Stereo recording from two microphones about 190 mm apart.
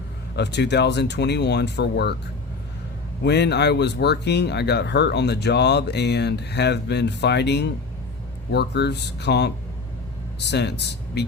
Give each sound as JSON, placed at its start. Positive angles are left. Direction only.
{"t": 0.3, "sound": "speech", "side_deg": 65}
{"t": 3.2, "sound": "speech", "side_deg": 60}